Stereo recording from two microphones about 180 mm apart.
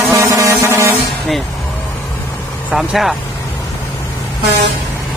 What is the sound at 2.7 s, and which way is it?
Speech, centre (ahead or behind).